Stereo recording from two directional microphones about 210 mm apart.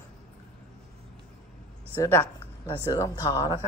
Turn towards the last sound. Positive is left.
turn(degrees=20)  # may be behind; listen again after turning